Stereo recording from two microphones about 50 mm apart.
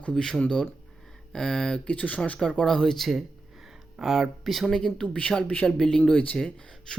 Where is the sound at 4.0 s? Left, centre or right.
Centre.